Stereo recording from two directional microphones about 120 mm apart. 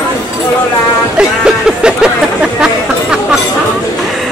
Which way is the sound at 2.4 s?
5° right (ahead or behind).